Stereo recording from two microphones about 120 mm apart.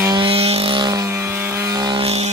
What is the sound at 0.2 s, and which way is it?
Vehicle, 55° right (ahead or behind).